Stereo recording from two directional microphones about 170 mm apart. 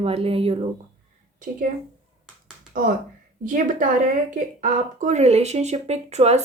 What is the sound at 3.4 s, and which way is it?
A woman's voice, 50° right (ahead or behind).